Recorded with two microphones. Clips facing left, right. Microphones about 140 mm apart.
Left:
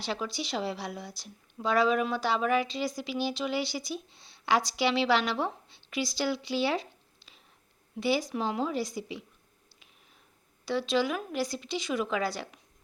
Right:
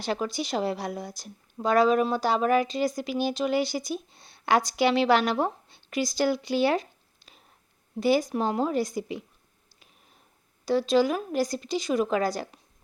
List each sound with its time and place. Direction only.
0.0 s a woman's voice: 50° right (ahead or behind)
10.7 s speech: 40° right (ahead or behind)